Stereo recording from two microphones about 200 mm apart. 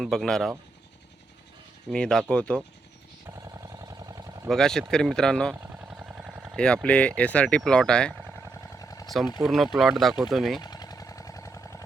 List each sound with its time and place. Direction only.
0.0 s speech: centre (ahead or behind)
1.9 s speech: 5° left (ahead or behind)
3.2 s a sound: 15° right (ahead or behind)
4.4 s speech: centre (ahead or behind)
5.5 s vehicle: 10° right (ahead or behind)
6.8 s speech: 5° left (ahead or behind)
7.2 s vehicle: 5° left (ahead or behind)
9.4 s speech: centre (ahead or behind)
10.6 s a sound: 20° left (ahead or behind)